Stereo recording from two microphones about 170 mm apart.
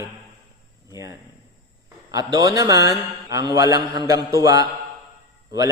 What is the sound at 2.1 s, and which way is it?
Speech, 20° right (ahead or behind).